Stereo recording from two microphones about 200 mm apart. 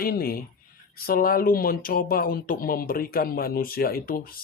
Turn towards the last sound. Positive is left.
turn(degrees=45)  # may be behind; listen again after turning